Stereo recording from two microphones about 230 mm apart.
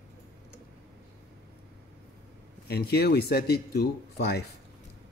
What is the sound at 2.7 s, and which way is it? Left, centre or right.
Speech, left.